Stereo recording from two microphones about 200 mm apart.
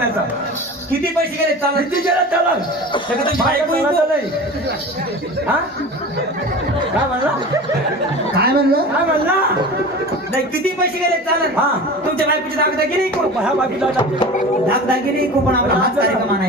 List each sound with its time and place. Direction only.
8.4 s speech: 50° right (ahead or behind)
13.4 s speech: 5° right (ahead or behind)